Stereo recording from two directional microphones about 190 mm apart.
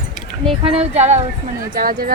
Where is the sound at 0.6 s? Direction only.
30° right (ahead or behind).